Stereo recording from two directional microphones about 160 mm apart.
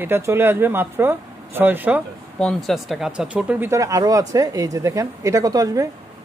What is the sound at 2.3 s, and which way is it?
Speech, centre (ahead or behind).